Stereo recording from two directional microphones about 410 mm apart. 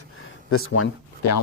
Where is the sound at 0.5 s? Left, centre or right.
Left.